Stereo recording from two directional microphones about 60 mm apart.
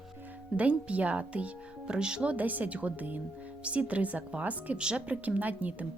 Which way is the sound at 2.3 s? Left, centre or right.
Right.